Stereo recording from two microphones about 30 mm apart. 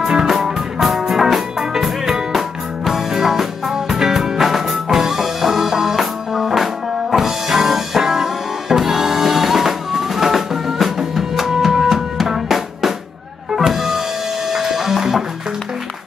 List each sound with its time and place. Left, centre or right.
0.3 s music: centre